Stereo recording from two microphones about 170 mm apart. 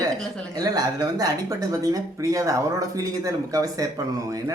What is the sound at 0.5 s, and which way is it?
Speech, 20° right (ahead or behind).